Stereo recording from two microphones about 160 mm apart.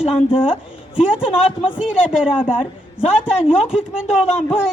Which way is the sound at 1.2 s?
35° left (ahead or behind).